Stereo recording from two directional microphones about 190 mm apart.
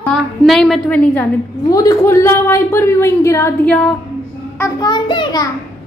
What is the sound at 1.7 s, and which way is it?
A woman's voice, 20° left (ahead or behind).